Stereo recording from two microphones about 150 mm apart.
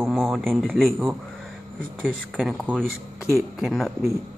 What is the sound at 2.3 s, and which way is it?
Speech, 5° right (ahead or behind).